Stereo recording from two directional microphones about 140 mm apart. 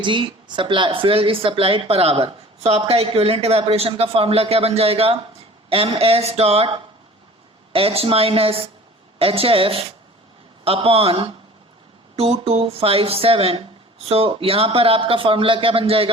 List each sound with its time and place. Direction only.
0.0 s speech: 35° right (ahead or behind)